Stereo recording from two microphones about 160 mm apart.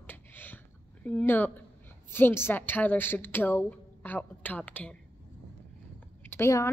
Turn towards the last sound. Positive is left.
turn(degrees=15)  # may be behind; listen again after turning